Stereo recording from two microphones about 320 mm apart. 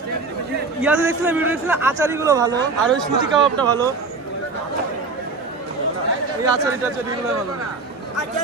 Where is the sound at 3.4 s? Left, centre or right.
Centre.